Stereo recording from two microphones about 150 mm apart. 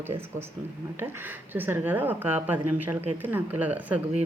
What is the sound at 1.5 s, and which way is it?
A woman's voice, 10° right (ahead or behind).